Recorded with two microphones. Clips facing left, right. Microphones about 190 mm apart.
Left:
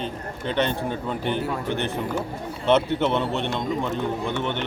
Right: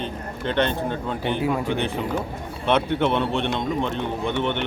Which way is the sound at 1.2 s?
15° right (ahead or behind).